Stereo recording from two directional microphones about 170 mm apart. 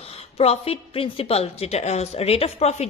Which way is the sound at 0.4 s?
35° left (ahead or behind).